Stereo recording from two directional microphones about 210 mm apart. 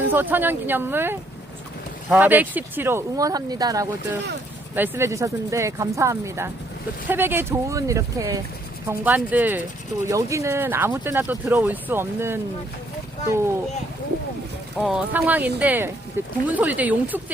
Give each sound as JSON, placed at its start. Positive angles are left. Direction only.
{"t": 0.1, "sound": "speech", "side_deg": -10}
{"t": 14.8, "sound": "speech", "side_deg": -5}